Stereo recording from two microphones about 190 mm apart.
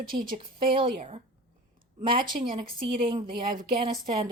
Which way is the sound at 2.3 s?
45° right (ahead or behind).